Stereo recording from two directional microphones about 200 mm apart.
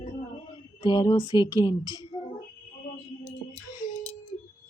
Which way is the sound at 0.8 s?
20° left (ahead or behind).